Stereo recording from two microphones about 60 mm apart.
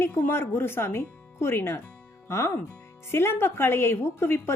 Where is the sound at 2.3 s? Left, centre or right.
Left.